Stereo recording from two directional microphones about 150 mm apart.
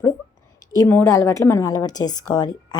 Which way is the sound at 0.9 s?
15° left (ahead or behind).